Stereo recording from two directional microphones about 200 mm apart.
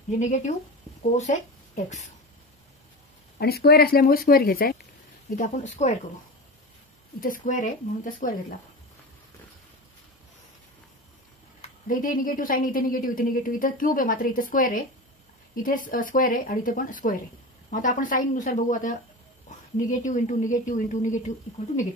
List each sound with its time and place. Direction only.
0.2 s speech: 35° left (ahead or behind)
3.3 s a woman's voice: 50° left (ahead or behind)
5.3 s speech: 35° left (ahead or behind)
7.2 s speech: 45° left (ahead or behind)
11.9 s a woman's voice: 40° left (ahead or behind)